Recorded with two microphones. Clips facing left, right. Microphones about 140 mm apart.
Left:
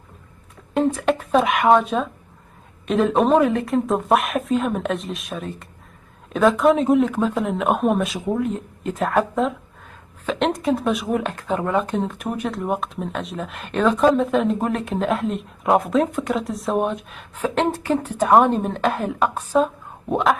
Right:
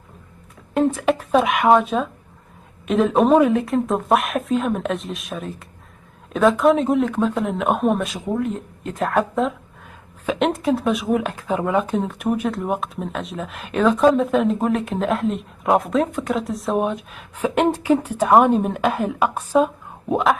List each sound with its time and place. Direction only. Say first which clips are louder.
0.7 s speech: right 1 dB; centre (ahead or behind)
17.4 s a woman's voice: right 2 dB; 10° right (ahead or behind)